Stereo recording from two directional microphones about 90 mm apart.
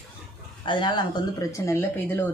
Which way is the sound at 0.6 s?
60° left (ahead or behind).